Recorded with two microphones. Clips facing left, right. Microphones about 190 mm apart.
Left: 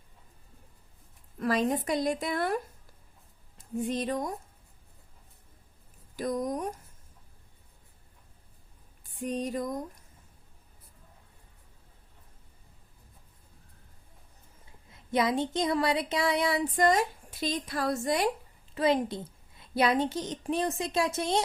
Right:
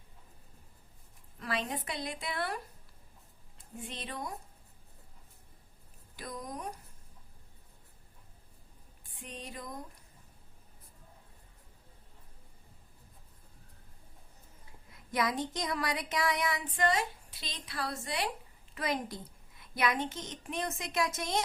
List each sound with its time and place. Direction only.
1.4 s a woman's voice: 45° left (ahead or behind)
3.6 s a sound: 45° left (ahead or behind)
6.1 s a woman's voice: 45° left (ahead or behind)
9.2 s a woman's voice: 45° left (ahead or behind)
14.8 s speech: 25° left (ahead or behind); by 18.3 s 45° left (ahead or behind)
18.7 s speech: 30° left (ahead or behind)